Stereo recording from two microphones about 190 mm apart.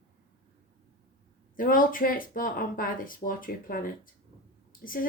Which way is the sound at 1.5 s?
45° left (ahead or behind).